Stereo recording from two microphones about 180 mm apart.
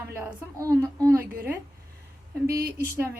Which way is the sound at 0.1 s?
15° right (ahead or behind).